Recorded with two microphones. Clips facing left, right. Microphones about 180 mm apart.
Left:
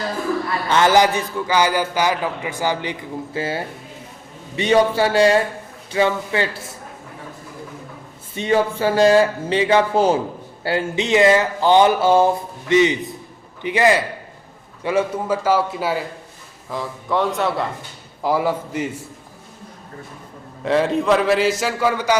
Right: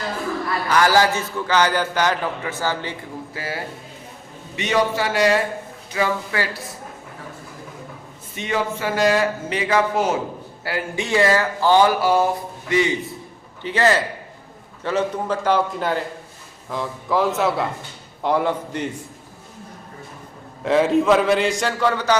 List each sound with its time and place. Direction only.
0.7 s a man's voice: 20° left (ahead or behind)
3.3 s speech: 25° left (ahead or behind)
8.4 s a man's voice: 30° left (ahead or behind); by 18.9 s 5° left (ahead or behind)
20.7 s a man's voice: centre (ahead or behind)